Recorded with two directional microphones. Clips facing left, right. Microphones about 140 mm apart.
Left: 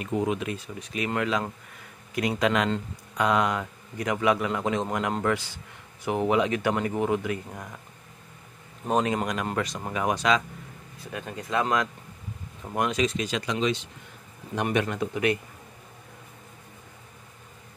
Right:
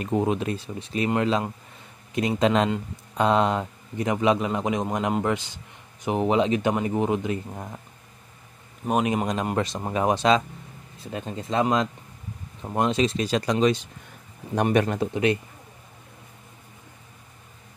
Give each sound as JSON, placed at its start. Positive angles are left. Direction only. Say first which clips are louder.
{"t": 0.0, "sound": "speech", "louder": "right 3 dB", "side_deg": -30}
{"t": 1.8, "sound": "a sound", "louder": "right 2 dB", "side_deg": -25}
{"t": 3.2, "sound": "a man's voice", "louder": "right 3 dB", "side_deg": -30}
{"t": 8.8, "sound": "a man's voice", "louder": "right 2 dB", "side_deg": -15}